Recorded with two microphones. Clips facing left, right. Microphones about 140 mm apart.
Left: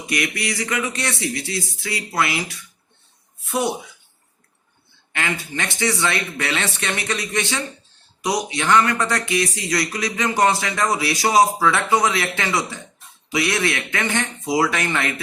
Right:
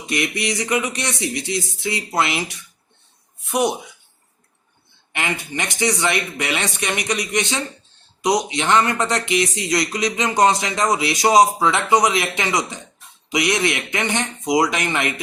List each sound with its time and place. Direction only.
0.1 s speech: 20° right (ahead or behind)
5.1 s speech: 20° right (ahead or behind)